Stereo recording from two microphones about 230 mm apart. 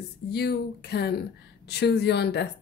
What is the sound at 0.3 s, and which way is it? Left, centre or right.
Speech, left.